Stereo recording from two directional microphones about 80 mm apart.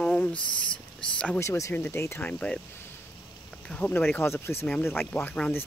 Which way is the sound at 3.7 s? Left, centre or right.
Centre.